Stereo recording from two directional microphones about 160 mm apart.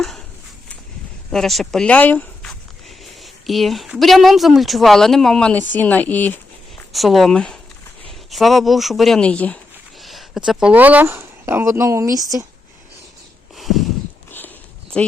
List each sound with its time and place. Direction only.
1.3 s speech: centre (ahead or behind)
6.9 s speech: centre (ahead or behind); by 12.5 s 20° right (ahead or behind)
13.6 s a sound: centre (ahead or behind)
14.3 s walk: 10° left (ahead or behind)